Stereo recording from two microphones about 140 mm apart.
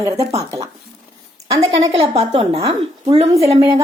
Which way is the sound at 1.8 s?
45° right (ahead or behind).